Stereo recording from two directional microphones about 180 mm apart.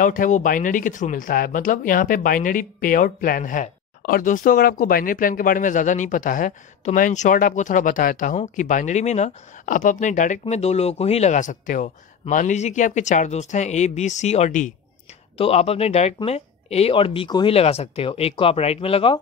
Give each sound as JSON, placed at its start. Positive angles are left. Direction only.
{"t": 0.0, "sound": "speech", "side_deg": 45}